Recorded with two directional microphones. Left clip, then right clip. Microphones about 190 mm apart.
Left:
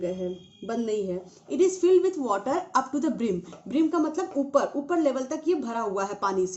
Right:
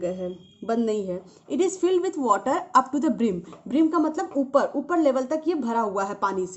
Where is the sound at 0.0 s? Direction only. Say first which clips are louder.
Right 1 dB; 25° right (ahead or behind).